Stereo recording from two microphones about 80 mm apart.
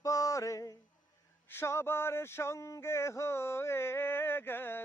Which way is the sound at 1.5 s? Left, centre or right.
Left.